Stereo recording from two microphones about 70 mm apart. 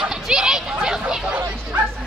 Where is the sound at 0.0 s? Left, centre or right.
Centre.